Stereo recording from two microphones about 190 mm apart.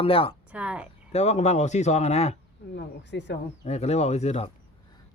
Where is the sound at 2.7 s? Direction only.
65° left (ahead or behind).